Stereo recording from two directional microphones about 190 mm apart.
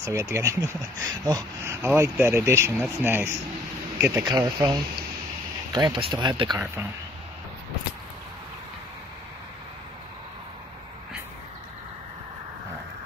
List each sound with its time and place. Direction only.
0.0 s speech: 15° right (ahead or behind)